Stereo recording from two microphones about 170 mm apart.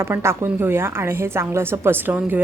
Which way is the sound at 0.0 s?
15° right (ahead or behind).